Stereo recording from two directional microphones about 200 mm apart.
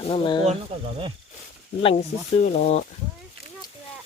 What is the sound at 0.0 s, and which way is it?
Speech, 25° left (ahead or behind).